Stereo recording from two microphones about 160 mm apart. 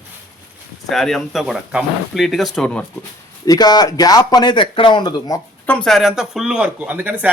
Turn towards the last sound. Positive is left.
turn(degrees=-10)  # may be behind; listen again after turning